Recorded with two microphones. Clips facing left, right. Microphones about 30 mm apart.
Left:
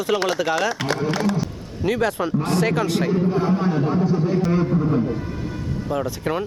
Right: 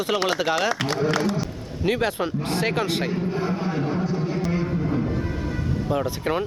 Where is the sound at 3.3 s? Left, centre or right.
Centre.